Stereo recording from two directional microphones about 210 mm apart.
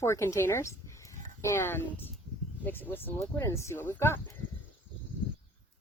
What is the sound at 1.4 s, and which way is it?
Speech, 15° left (ahead or behind).